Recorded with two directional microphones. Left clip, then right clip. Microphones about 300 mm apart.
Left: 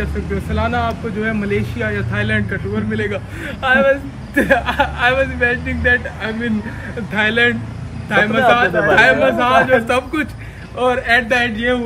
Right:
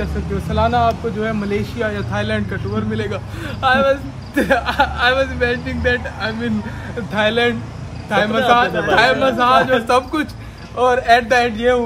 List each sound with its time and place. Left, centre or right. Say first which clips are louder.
0.5 s speech: right 4 dB; centre